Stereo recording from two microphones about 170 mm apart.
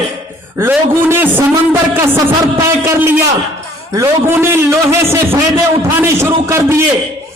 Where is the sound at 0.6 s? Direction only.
10° right (ahead or behind).